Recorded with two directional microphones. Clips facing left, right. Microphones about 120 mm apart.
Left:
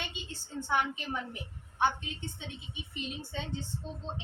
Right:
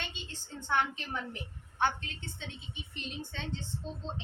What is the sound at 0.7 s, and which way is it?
Speech, 10° left (ahead or behind).